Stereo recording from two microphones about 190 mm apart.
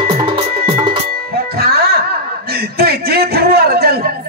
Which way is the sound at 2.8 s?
55° right (ahead or behind).